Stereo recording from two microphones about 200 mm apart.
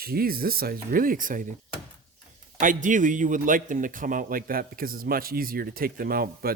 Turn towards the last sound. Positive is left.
turn(degrees=-45)  # may be behind; listen again after turning